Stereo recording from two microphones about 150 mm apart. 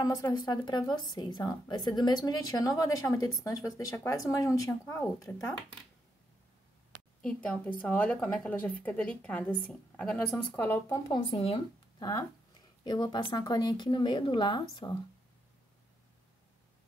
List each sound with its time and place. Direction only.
0.0 s a woman's voice: 25° left (ahead or behind)
7.2 s a woman's voice: 10° left (ahead or behind)
11.1 s speech: 35° left (ahead or behind)
12.0 s a woman's voice: 25° left (ahead or behind)